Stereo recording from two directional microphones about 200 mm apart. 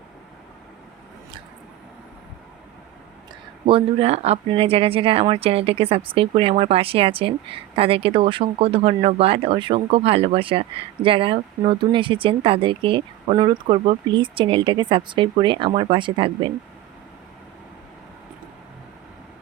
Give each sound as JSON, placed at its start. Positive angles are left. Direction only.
{"t": 3.7, "sound": "speech", "side_deg": -30}